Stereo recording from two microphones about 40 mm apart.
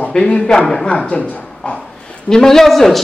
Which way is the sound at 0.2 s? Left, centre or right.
Left.